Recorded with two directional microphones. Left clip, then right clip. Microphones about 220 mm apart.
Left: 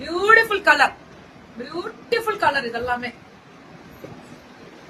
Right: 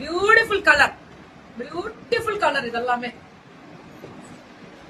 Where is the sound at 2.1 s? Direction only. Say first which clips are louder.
Left 1 dB; 10° left (ahead or behind).